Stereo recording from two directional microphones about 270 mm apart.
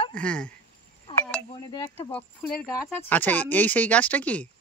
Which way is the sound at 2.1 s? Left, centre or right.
Centre.